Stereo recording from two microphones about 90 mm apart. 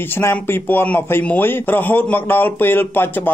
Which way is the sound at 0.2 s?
25° left (ahead or behind).